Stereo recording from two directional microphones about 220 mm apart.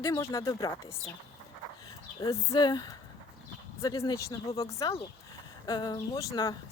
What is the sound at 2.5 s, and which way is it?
Speech, 20° left (ahead or behind).